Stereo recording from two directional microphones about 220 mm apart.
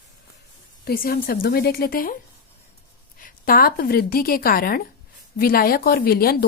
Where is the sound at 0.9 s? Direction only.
45° left (ahead or behind).